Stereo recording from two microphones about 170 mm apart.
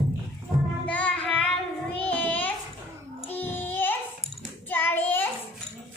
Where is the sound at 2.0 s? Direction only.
10° left (ahead or behind).